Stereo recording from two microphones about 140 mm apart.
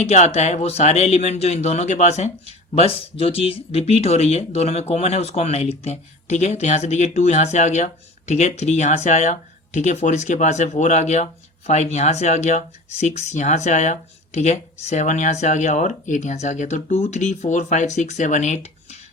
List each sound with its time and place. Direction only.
0.0 s speech: 50° left (ahead or behind)
2.7 s speech: 45° left (ahead or behind)